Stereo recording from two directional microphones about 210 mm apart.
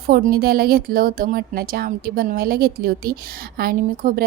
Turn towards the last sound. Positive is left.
turn(degrees=-40)  # may be behind; listen again after turning